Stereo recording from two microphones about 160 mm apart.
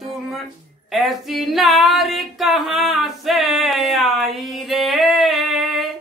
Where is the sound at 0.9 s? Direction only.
Centre (ahead or behind).